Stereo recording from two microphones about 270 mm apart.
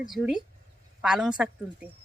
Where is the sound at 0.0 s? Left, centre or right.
Centre.